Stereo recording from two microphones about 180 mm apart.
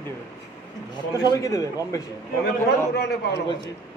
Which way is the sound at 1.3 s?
20° left (ahead or behind).